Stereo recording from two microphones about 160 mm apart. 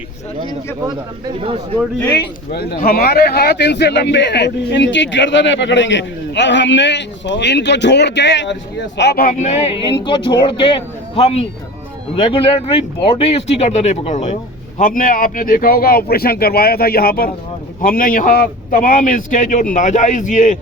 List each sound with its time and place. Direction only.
0.9 s speech: 30° right (ahead or behind)
2.5 s a man's voice: 85° left
9.4 s speech: 45° left (ahead or behind)
14.8 s a man's voice: 55° left (ahead or behind)